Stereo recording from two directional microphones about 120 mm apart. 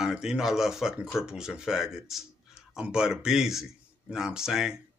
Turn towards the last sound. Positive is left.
turn(degrees=-5)  # may be behind; listen again after turning